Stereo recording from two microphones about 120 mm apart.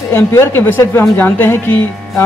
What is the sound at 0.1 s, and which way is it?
Speech, 20° left (ahead or behind).